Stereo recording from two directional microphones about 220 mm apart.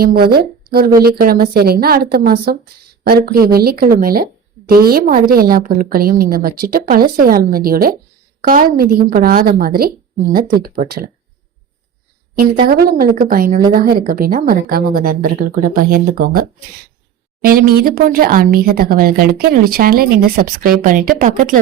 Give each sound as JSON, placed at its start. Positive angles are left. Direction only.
{"t": 0.0, "sound": "a woman's voice", "side_deg": -45}
{"t": 12.6, "sound": "a woman's voice", "side_deg": -45}